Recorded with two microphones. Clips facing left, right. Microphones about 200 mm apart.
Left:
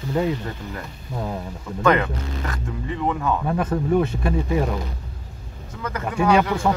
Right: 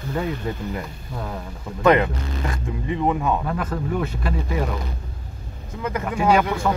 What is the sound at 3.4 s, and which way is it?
Speech, 25° left (ahead or behind).